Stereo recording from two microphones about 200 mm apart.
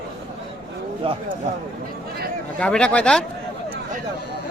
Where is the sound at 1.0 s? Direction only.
25° right (ahead or behind).